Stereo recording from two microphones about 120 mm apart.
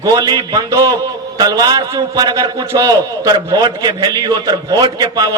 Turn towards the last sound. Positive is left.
turn(degrees=-35)  # may be behind; listen again after turning